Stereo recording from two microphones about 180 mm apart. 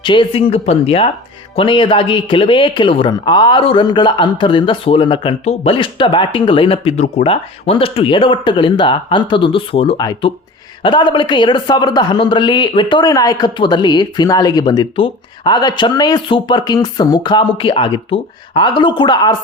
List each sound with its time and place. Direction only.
0.0 s speech: 25° left (ahead or behind)